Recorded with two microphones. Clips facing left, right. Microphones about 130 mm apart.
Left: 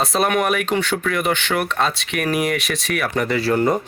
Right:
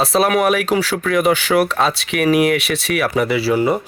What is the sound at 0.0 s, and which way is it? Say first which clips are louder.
Speech: right 4 dB; centre (ahead or behind).